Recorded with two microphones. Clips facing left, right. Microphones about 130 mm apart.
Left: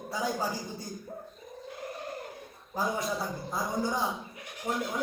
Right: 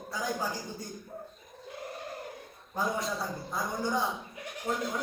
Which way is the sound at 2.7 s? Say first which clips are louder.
Left 1 dB; centre (ahead or behind).